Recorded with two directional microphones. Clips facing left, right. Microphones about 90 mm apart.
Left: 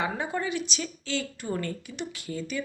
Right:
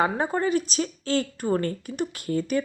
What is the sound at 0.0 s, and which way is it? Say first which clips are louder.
Speech: right 6 dB; 40° right (ahead or behind).